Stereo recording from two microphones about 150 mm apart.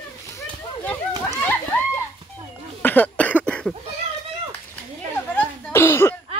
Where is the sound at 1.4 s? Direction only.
10° left (ahead or behind).